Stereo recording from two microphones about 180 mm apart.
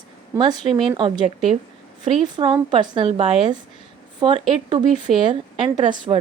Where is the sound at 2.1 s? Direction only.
25° right (ahead or behind).